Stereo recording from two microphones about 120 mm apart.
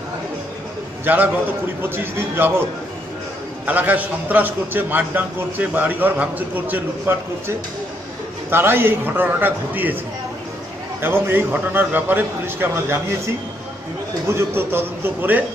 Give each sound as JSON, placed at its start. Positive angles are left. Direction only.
{"t": 1.0, "sound": "a man's voice", "side_deg": -15}
{"t": 2.4, "sound": "a man's voice", "side_deg": -15}
{"t": 3.6, "sound": "a man's voice", "side_deg": -10}
{"t": 11.0, "sound": "a man's voice", "side_deg": -20}
{"t": 14.2, "sound": "a man's voice", "side_deg": -20}